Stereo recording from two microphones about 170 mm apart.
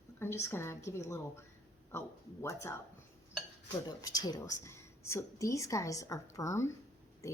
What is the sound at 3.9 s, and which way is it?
Speech, 25° left (ahead or behind).